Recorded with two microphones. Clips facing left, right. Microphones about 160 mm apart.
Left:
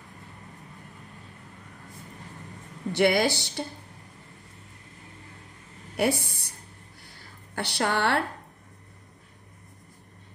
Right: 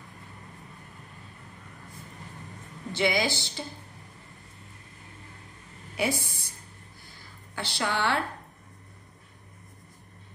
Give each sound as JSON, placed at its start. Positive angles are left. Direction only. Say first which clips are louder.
{"t": 2.9, "sound": "speech", "louder": "left 4 dB", "side_deg": 60}
{"t": 5.9, "sound": "a woman's voice", "louder": "left 4 dB", "side_deg": 65}
{"t": 7.1, "sound": "a sound", "louder": "left 1 dB", "side_deg": 65}